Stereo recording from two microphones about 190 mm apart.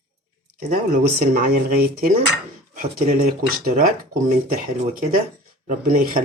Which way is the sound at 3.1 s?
50° right (ahead or behind).